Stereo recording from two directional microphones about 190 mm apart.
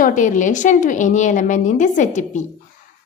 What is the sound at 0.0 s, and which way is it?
A woman's voice, 45° left (ahead or behind).